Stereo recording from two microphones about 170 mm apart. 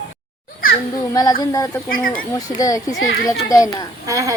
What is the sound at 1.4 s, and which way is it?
Speech, 20° left (ahead or behind).